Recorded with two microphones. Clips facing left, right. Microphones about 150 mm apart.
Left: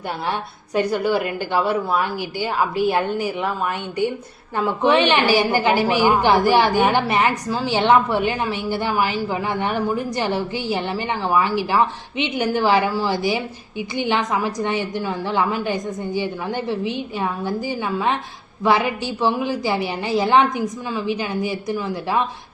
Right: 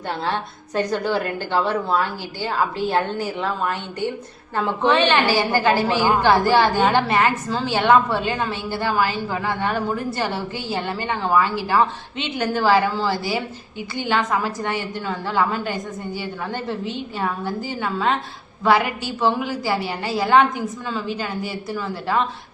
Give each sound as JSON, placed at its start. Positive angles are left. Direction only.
{"t": 0.3, "sound": "a woman's voice", "side_deg": 15}
{"t": 4.5, "sound": "a woman's voice", "side_deg": 10}